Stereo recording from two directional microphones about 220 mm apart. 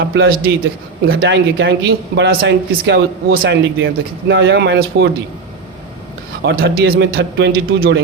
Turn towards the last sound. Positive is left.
turn(degrees=-45)  # may be behind; listen again after turning